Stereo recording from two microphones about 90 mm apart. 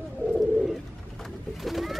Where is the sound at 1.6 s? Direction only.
Centre (ahead or behind).